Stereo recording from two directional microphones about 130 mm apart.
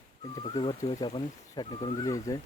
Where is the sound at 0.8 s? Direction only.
55° left (ahead or behind).